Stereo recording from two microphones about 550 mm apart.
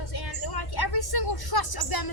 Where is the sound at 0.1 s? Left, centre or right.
Left.